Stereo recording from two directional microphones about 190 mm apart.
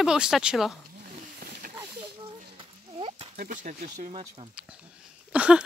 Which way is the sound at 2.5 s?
30° right (ahead or behind).